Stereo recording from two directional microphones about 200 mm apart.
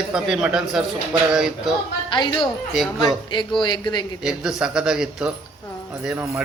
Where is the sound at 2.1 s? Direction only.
25° left (ahead or behind).